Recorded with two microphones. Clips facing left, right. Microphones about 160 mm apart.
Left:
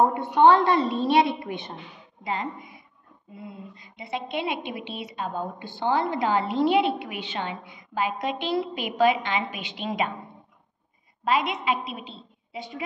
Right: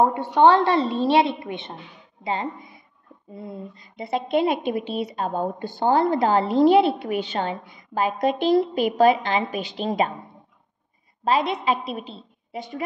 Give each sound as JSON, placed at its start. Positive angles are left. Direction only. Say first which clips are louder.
{"t": 0.2, "sound": "a woman's voice", "louder": "right 1 dB", "side_deg": -35}
{"t": 11.2, "sound": "a woman's voice", "louder": "right 3 dB", "side_deg": -30}